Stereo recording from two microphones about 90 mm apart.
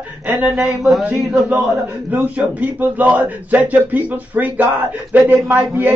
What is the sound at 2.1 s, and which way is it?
A man's voice, 20° right (ahead or behind).